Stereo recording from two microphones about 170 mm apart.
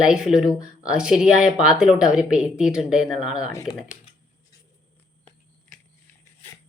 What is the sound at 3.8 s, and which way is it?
Speech, 50° left (ahead or behind).